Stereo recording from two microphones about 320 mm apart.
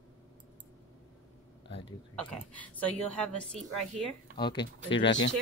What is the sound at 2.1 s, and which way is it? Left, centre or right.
Speech, centre.